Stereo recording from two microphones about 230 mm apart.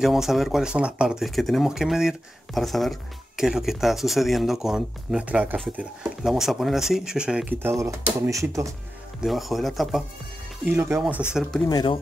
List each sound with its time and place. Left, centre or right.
0.0 s speech: centre
9.2 s speech: centre
11.6 s speech: centre